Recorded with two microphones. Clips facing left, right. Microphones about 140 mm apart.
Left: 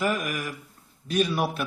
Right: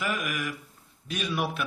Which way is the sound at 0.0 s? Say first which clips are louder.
Left 4 dB; 40° left (ahead or behind).